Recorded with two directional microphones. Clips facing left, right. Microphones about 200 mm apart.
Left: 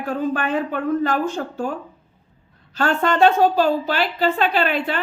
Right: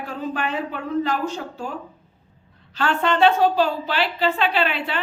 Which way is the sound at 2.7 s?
45° left (ahead or behind).